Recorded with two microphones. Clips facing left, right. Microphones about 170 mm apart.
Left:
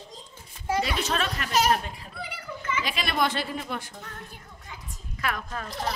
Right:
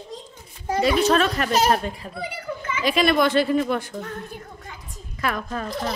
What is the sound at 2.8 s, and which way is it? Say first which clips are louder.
Speech: right 9 dB; 45° right (ahead or behind).